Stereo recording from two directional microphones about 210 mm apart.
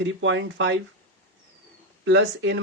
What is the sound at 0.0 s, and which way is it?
Speech, 60° right (ahead or behind).